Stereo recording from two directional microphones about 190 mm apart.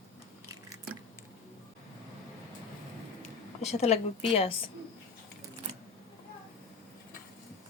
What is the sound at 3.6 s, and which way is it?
Speech, 35° left (ahead or behind).